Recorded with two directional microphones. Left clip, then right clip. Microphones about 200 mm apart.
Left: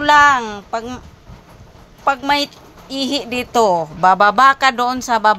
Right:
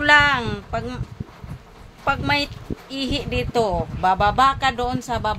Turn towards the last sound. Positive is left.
turn(degrees=25)  # may be behind; listen again after turning